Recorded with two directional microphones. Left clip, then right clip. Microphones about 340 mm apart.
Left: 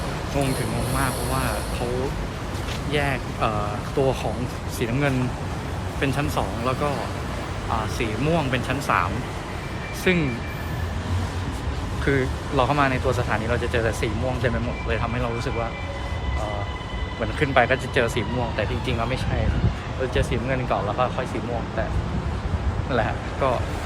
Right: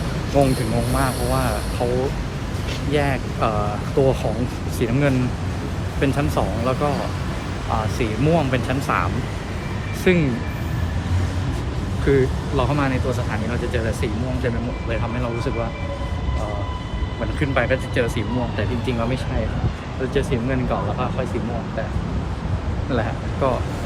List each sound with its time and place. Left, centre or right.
0.4 s speech: centre
2.9 s speech: centre
7.9 s speech: centre
12.0 s speech: centre
17.4 s speech: centre
22.9 s speech: centre